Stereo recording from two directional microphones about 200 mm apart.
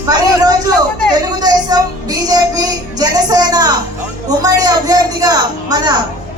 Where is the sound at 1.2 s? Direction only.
20° right (ahead or behind).